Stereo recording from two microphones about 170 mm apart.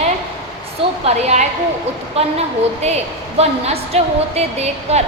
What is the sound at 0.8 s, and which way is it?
Speech, 30° right (ahead or behind).